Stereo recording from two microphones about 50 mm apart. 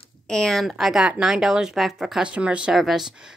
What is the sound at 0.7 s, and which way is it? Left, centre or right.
Speech, centre.